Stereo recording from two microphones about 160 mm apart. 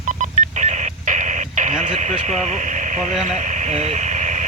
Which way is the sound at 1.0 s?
50° right (ahead or behind).